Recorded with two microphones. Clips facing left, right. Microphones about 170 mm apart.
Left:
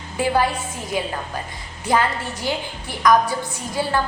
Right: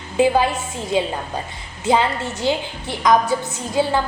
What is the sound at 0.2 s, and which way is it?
A woman's voice, 20° right (ahead or behind).